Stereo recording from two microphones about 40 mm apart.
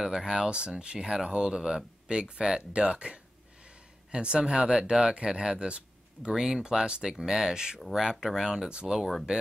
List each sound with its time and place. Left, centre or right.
0.0 s speech: centre
6.3 s speech: centre
8.6 s speech: right